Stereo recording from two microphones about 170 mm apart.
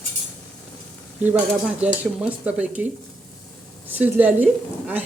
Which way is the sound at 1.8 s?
5° right (ahead or behind).